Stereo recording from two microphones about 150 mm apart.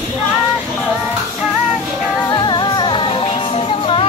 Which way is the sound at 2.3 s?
30° left (ahead or behind).